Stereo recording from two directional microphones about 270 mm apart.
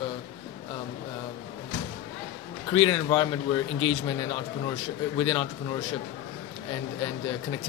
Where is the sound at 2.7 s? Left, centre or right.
Centre.